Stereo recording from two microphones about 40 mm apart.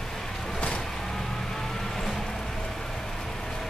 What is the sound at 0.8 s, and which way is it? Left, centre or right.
Vehicle, centre.